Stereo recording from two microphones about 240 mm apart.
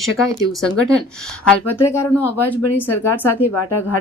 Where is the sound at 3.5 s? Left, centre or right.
Left.